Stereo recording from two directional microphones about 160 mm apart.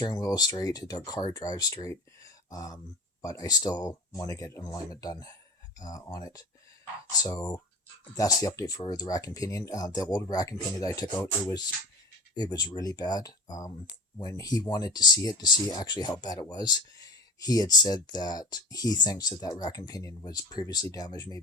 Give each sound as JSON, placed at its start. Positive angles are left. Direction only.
{"t": 0.0, "sound": "speech", "side_deg": 25}